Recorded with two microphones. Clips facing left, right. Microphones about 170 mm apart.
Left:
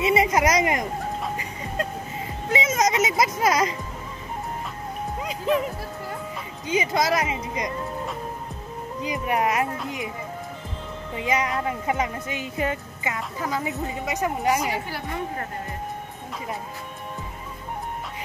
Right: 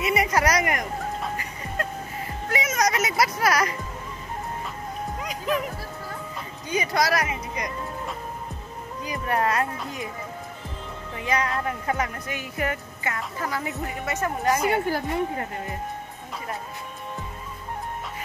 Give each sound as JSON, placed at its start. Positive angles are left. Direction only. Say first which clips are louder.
{"t": 0.0, "sound": "speech", "louder": "left 3 dB", "side_deg": 25}
{"t": 1.3, "sound": "music", "louder": "left 2 dB", "side_deg": 20}
{"t": 2.5, "sound": "a child's voice", "louder": "left 2 dB", "side_deg": 25}
{"t": 5.2, "sound": "speech", "louder": "left 4 dB", "side_deg": 25}
{"t": 6.7, "sound": "a child's voice", "louder": "left 1 dB", "side_deg": 20}
{"t": 9.0, "sound": "speech", "louder": "left 1 dB", "side_deg": 15}
{"t": 11.1, "sound": "speech", "louder": "left 1 dB", "side_deg": 20}
{"t": 14.7, "sound": "a woman's voice", "louder": "right 6 dB", "side_deg": -45}